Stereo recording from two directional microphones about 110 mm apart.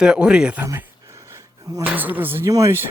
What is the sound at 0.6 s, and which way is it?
Speech, 20° right (ahead or behind).